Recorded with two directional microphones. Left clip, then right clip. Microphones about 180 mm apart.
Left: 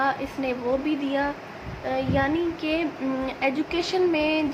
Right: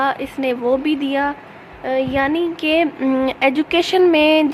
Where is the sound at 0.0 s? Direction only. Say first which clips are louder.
Right 6 dB; 50° right (ahead or behind).